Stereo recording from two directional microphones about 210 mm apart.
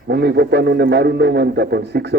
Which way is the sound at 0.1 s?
50° right (ahead or behind).